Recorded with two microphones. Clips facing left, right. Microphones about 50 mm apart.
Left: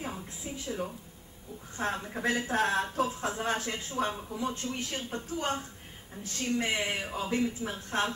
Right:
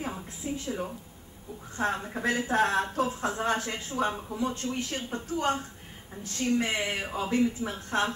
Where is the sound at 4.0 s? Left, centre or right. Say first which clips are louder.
Right 3 dB; centre.